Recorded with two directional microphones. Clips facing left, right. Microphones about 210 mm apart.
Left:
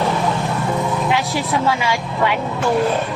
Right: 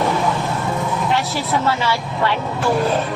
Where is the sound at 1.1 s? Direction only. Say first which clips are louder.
Left 1 dB; 15° left (ahead or behind).